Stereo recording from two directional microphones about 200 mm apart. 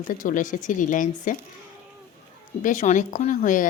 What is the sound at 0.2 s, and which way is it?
A woman's voice, 40° left (ahead or behind).